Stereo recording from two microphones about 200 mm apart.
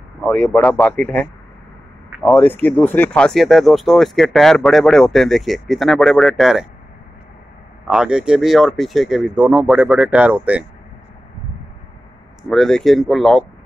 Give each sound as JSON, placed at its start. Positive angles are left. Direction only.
{"t": 0.2, "sound": "speech", "side_deg": 5}
{"t": 7.8, "sound": "speech", "side_deg": -5}
{"t": 12.4, "sound": "speech", "side_deg": 0}